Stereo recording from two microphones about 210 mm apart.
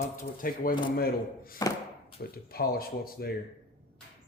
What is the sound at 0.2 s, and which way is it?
Speech, 40° left (ahead or behind).